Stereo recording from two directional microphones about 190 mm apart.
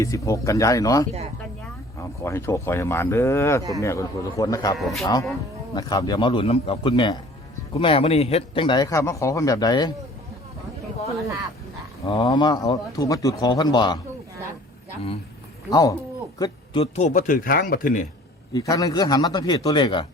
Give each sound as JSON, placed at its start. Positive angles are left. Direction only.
{"t": 0.0, "sound": "speech", "side_deg": 15}
{"t": 4.8, "sound": "speech", "side_deg": 0}
{"t": 5.7, "sound": "a man's voice", "side_deg": 20}
{"t": 12.0, "sound": "a man's voice", "side_deg": 25}
{"t": 15.7, "sound": "a man's voice", "side_deg": 20}
{"t": 16.4, "sound": "speech", "side_deg": 30}
{"t": 18.5, "sound": "a man's voice", "side_deg": 20}